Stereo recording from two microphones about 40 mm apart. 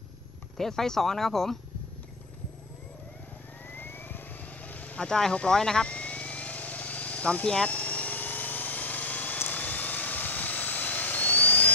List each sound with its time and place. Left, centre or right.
0.6 s speech: centre
3.7 s vehicle: left
4.6 s vehicle: left
5.0 s speech: centre
5.9 s vehicle: left
7.4 s speech: left
7.7 s vehicle: left